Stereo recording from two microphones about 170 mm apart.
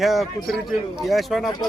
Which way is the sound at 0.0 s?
Centre (ahead or behind).